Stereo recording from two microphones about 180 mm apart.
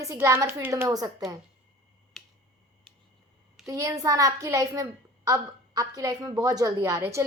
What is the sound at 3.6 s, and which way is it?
A woman's voice, 20° right (ahead or behind).